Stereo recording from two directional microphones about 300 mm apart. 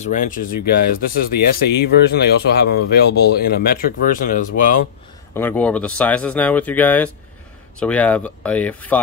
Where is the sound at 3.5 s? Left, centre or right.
Left.